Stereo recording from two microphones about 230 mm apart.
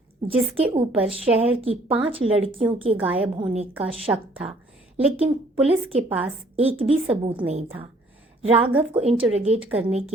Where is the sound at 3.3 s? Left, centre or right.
Right.